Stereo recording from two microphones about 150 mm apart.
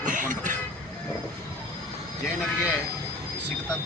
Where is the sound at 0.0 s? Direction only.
60° right (ahead or behind).